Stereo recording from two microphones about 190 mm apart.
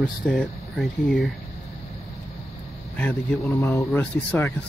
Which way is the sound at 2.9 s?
10° left (ahead or behind).